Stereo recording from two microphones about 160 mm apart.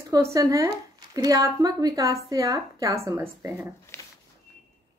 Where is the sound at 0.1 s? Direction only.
20° right (ahead or behind).